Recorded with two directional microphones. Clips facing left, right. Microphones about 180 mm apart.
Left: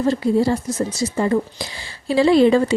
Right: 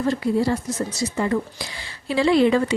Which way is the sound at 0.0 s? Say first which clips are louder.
Left 3 dB; 30° left (ahead or behind).